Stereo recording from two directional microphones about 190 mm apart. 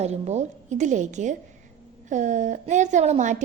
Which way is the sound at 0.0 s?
35° right (ahead or behind).